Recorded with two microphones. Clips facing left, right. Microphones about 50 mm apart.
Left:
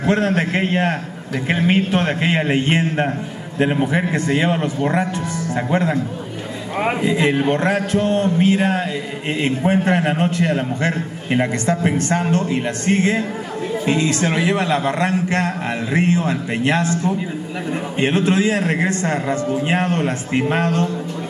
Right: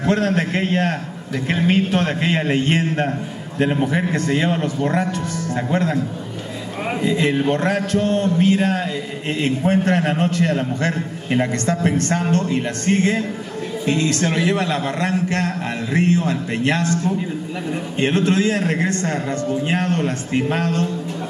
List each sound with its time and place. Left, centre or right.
0.0 s a man's voice: centre
7.0 s a man's voice: centre